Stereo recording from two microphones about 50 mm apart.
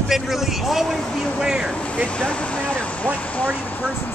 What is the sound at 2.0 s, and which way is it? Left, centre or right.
Speech, left.